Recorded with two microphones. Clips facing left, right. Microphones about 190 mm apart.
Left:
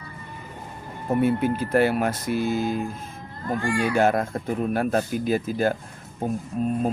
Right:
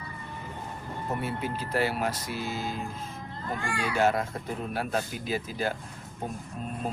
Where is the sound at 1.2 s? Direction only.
55° left (ahead or behind).